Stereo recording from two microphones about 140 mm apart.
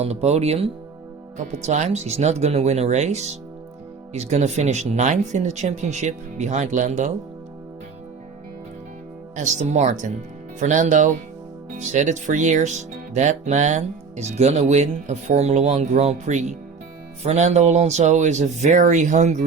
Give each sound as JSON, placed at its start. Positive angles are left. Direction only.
{"t": 0.0, "sound": "speech", "side_deg": -50}
{"t": 9.3, "sound": "speech", "side_deg": -60}